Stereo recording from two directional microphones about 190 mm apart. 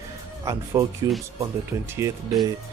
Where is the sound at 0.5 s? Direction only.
15° right (ahead or behind).